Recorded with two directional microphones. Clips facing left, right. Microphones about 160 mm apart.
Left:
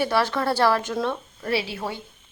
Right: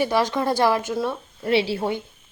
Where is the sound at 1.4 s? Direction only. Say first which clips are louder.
Right 5 dB; 30° right (ahead or behind).